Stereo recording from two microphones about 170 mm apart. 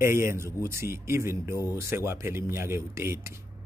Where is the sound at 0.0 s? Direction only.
15° right (ahead or behind).